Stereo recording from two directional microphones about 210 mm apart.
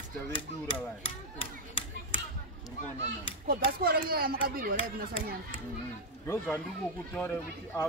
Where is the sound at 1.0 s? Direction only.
25° left (ahead or behind).